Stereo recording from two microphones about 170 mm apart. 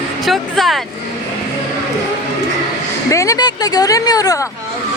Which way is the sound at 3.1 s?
20° left (ahead or behind).